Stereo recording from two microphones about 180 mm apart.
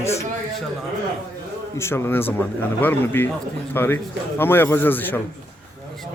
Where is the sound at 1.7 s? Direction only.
15° left (ahead or behind).